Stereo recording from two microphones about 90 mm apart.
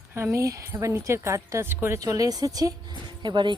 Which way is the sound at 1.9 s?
40° right (ahead or behind).